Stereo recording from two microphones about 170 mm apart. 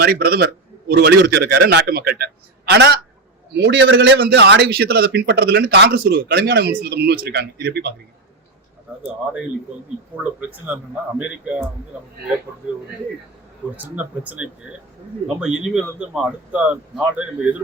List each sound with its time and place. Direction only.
0.0 s a man's voice: 65° right (ahead or behind)
0.9 s a man's voice: 75° right (ahead or behind)
2.7 s a man's voice: 85° right
11.2 s speech: 10° right (ahead or behind)
13.7 s speech: 10° right (ahead or behind)